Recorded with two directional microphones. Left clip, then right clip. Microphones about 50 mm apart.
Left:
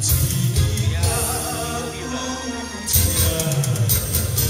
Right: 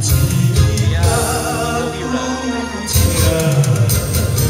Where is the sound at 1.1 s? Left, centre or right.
Left.